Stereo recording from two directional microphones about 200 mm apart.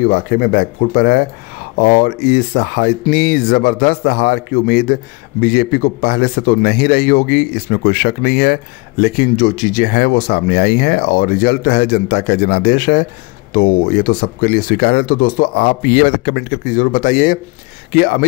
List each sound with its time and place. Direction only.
0.1 s speech: 45° left (ahead or behind)